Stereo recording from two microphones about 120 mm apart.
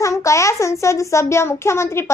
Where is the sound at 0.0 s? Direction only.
25° left (ahead or behind).